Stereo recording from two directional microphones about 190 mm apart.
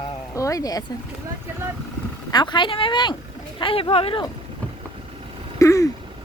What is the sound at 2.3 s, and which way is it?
Speech, 25° left (ahead or behind).